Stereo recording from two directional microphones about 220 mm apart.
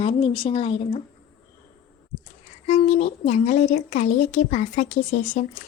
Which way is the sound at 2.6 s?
30° left (ahead or behind).